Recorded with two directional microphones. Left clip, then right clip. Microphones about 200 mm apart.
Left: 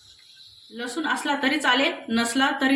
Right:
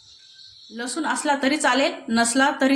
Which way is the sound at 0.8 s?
45° right (ahead or behind).